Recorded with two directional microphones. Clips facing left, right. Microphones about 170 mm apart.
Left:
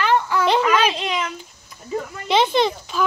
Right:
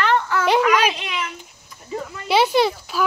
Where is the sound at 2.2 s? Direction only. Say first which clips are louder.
Right 1 dB; 10° right (ahead or behind).